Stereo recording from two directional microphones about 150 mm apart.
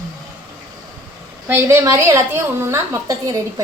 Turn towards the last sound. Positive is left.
turn(degrees=-20)  # may be behind; listen again after turning